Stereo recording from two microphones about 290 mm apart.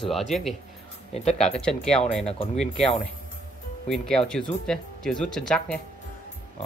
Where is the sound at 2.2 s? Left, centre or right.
Centre.